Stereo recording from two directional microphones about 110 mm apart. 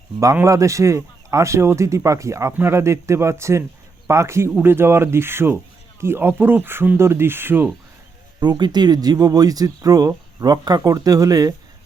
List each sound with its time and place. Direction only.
0.4 s speech: 30° right (ahead or behind)
8.4 s speech: 40° right (ahead or behind)